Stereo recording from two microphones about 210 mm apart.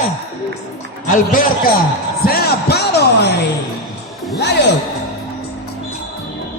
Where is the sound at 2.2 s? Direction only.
45° left (ahead or behind).